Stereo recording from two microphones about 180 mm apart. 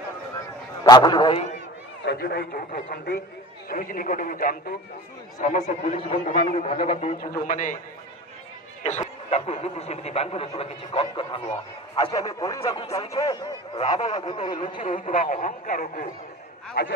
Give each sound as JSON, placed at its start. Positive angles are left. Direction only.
{"t": 0.8, "sound": "speech", "side_deg": 25}
{"t": 2.0, "sound": "a man's voice", "side_deg": 60}
{"t": 5.9, "sound": "speech", "side_deg": 35}
{"t": 9.3, "sound": "speech", "side_deg": 35}
{"t": 14.9, "sound": "speech", "side_deg": 45}
{"t": 16.8, "sound": "a man's voice", "side_deg": 65}